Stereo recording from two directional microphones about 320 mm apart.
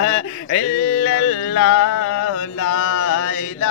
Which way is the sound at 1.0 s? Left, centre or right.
Left.